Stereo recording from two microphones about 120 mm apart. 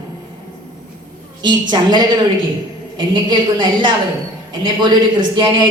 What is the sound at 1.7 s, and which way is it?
A man's voice, 35° right (ahead or behind).